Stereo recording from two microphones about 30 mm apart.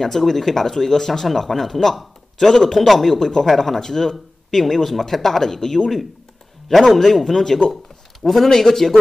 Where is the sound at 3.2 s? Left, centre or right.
Centre.